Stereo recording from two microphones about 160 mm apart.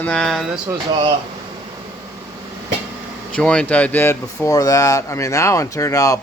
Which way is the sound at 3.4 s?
5° left (ahead or behind).